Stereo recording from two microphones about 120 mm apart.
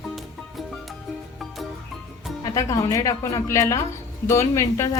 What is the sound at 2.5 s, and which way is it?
A woman's voice, 25° left (ahead or behind).